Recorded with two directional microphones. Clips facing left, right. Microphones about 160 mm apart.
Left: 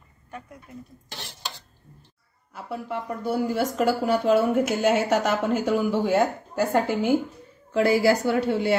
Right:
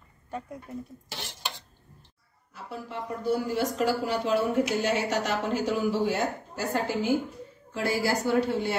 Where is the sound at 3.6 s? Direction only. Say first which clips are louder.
Left 3 dB; 50° left (ahead or behind).